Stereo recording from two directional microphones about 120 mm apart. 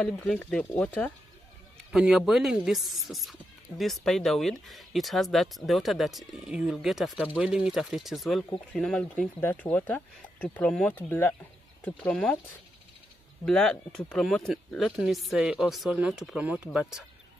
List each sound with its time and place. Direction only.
0.0 s speech: 10° left (ahead or behind)
1.8 s speech: 5° right (ahead or behind)
9.4 s speech: 20° left (ahead or behind)
13.5 s speech: 5° left (ahead or behind)